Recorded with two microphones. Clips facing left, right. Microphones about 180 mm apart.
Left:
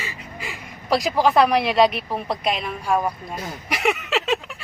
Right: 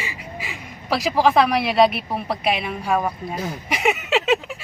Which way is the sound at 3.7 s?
Centre (ahead or behind).